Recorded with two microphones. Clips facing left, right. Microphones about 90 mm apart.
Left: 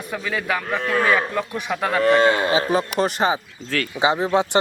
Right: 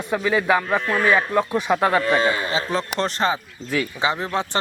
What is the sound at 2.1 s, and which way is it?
Speech, 55° left (ahead or behind).